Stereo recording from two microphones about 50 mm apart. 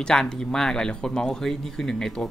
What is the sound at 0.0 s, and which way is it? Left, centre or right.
Speech, centre.